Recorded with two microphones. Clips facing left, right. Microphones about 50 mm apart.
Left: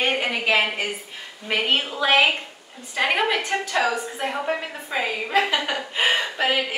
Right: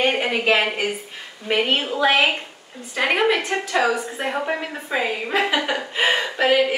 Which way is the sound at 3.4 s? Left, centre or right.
Centre.